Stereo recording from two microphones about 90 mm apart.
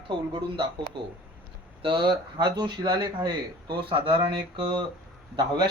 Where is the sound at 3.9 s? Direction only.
90° right; by 4.8 s 70° right (ahead or behind).